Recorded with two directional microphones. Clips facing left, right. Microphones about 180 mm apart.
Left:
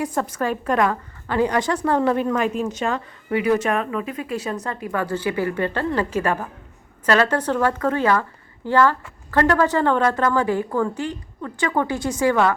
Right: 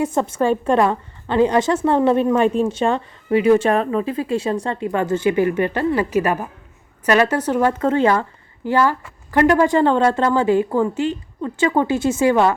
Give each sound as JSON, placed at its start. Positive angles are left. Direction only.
{"t": 0.0, "sound": "a woman's voice", "side_deg": -25}